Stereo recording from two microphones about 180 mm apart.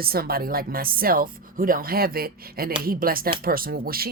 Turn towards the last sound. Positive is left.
turn(degrees=-55)  # may be behind; listen again after turning